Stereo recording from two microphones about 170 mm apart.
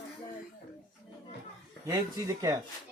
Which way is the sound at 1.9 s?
20° right (ahead or behind).